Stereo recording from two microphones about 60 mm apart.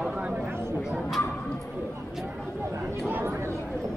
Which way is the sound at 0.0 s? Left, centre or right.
Centre.